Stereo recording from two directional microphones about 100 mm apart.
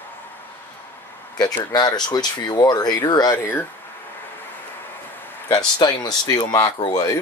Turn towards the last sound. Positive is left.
turn(degrees=40)  # may be behind; listen again after turning